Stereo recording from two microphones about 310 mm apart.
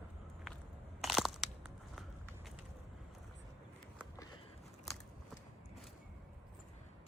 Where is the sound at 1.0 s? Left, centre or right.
Centre.